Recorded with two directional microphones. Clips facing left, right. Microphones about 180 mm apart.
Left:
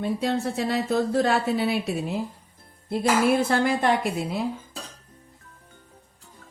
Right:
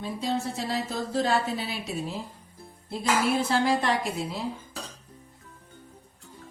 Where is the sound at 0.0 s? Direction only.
60° left (ahead or behind).